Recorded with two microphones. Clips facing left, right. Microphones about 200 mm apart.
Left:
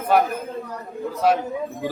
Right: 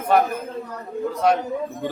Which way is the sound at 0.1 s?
5° left (ahead or behind).